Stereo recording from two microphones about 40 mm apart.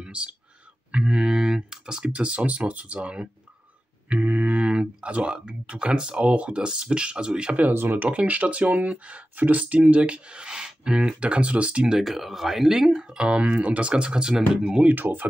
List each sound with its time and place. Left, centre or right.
0.0 s speech: right
2.1 s speech: right
7.7 s speech: right
8.1 s speech: right
9.3 s speech: right
12.0 s speech: centre; by 14.9 s right
14.9 s speech: right